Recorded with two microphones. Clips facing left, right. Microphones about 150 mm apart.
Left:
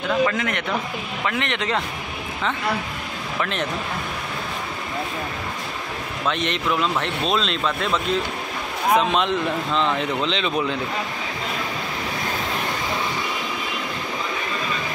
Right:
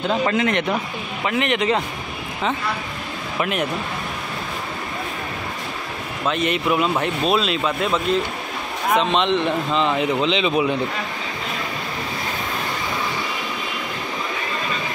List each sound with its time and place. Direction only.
0.1 s speech: 25° right (ahead or behind)
1.3 s speech: 5° right (ahead or behind)
3.3 s speech: 10° right (ahead or behind)
6.2 s speech: 5° right (ahead or behind)